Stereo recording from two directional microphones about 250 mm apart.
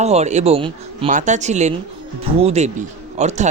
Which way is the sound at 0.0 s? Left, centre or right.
Right.